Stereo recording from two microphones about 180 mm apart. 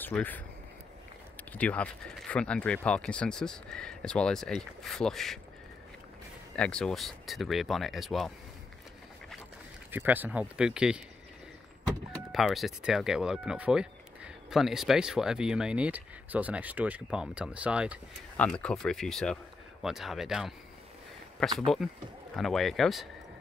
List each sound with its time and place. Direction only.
0.0 s speech: 10° left (ahead or behind)
6.5 s speech: 5° left (ahead or behind)
9.8 s speech: 10° right (ahead or behind)
18.4 s speech: 5° left (ahead or behind)